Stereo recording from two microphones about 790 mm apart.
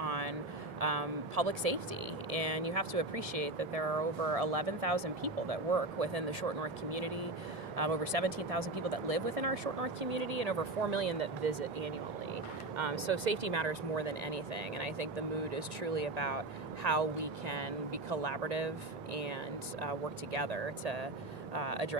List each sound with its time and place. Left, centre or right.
0.0 s a sound: right
2.3 s speech: right
19.8 s speech: right